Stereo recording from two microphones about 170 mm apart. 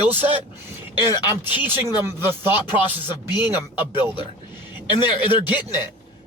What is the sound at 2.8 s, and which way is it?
Speech, 25° left (ahead or behind).